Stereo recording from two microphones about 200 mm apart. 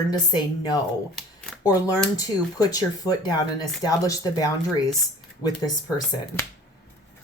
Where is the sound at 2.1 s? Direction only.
15° left (ahead or behind).